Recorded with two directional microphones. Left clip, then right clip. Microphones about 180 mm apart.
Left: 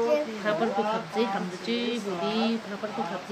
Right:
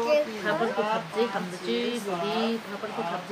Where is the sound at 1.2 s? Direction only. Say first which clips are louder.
Even; 25° left (ahead or behind).